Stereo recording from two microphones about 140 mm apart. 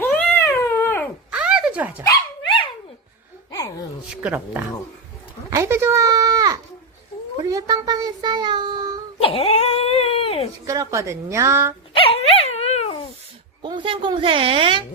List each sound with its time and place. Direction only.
0.0 s cat: 10° left (ahead or behind)
1.3 s a sound: 5° right (ahead or behind)
4.1 s speech: 10° right (ahead or behind)
5.5 s a sound: 20° right (ahead or behind)
7.4 s speech: 25° right (ahead or behind)
9.2 s a sound: 45° left (ahead or behind)
10.7 s a woman's voice: 20° right (ahead or behind)
11.9 s dog: 45° left (ahead or behind)
13.6 s a woman's voice: 35° right (ahead or behind)